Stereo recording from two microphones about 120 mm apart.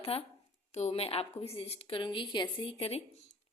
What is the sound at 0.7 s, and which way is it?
A woman's voice, 65° left (ahead or behind).